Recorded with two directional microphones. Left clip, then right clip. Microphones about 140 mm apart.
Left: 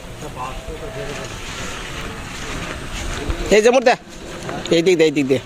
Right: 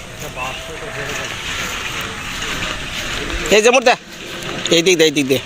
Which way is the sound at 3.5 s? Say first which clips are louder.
Right 1 dB; 25° left (ahead or behind).